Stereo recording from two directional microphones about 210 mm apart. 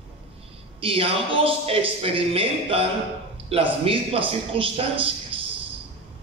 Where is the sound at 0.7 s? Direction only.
25° right (ahead or behind).